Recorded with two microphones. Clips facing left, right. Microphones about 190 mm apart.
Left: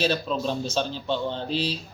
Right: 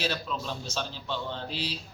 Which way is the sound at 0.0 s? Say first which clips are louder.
Left 7 dB; 25° left (ahead or behind).